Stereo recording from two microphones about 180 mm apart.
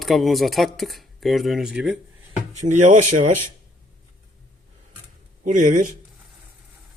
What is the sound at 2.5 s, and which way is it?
Speech, 40° right (ahead or behind).